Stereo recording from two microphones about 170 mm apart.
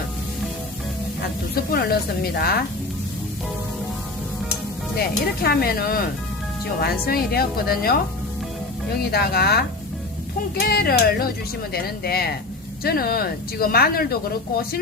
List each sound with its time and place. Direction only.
1.5 s speech: 65° left (ahead or behind)
4.9 s speech: 65° left (ahead or behind)
9.1 s speech: 65° left (ahead or behind)